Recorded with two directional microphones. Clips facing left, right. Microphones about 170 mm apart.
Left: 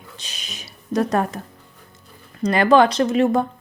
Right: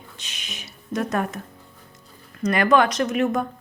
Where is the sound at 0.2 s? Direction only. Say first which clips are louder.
Left 1 dB; 35° left (ahead or behind).